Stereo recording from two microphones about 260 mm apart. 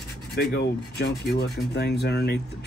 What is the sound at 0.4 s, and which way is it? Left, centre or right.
Speech, left.